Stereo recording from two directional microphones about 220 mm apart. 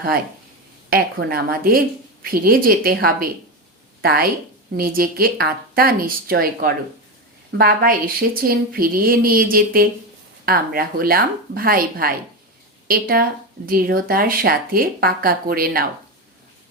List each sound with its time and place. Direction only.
0.9 s speech: 45° right (ahead or behind)